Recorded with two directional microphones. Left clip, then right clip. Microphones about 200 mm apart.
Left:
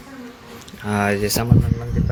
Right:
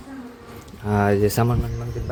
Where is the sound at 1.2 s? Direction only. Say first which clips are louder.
Right 1 dB; 40° right (ahead or behind).